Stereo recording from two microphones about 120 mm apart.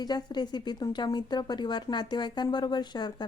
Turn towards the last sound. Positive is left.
turn(degrees=35)  # may be behind; listen again after turning